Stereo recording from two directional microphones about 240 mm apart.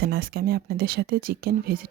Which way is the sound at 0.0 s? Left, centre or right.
Right.